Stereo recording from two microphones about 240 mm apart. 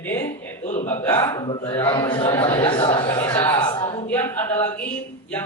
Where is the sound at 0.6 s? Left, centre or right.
Left.